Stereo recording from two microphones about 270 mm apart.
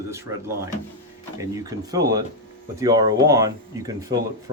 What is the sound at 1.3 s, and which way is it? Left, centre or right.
Speech, centre.